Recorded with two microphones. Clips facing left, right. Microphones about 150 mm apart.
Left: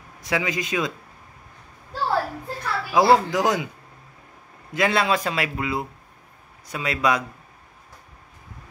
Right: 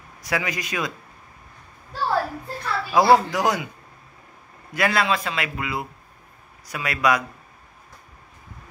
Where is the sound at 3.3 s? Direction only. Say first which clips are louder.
Left 1 dB; 20° left (ahead or behind).